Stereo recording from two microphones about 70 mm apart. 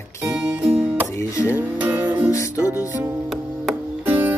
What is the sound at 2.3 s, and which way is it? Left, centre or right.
Music, left.